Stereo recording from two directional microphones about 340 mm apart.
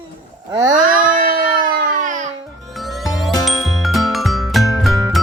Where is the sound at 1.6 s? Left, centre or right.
Right.